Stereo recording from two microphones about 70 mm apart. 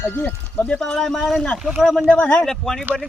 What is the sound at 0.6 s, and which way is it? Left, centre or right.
Speech, centre.